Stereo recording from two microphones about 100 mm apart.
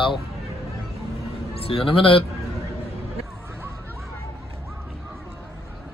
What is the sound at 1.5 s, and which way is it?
Speech, 70° left (ahead or behind).